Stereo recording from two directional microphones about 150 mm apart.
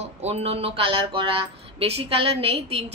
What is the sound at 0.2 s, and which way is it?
A woman's voice, 45° right (ahead or behind).